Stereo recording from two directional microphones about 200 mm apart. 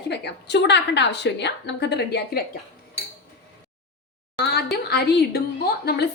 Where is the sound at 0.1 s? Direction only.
60° left (ahead or behind).